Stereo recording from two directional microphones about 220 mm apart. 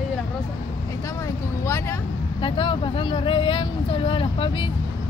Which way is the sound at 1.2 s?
15° left (ahead or behind).